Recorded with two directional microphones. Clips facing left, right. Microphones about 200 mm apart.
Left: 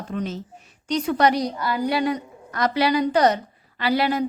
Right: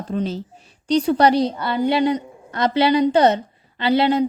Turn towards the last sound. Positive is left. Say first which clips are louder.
# right 4 dB
turn(degrees=-25)  # may be behind; listen again after turning